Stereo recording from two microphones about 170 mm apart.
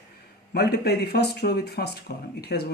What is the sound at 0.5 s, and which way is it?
Speech, 70° left (ahead or behind).